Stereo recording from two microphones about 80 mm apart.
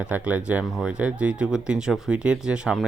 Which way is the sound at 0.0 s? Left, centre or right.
Centre.